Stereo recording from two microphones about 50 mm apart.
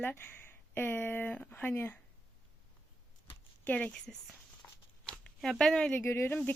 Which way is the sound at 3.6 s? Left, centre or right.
Left.